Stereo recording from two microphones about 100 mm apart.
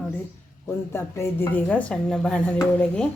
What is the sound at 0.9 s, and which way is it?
A woman's voice, 25° left (ahead or behind).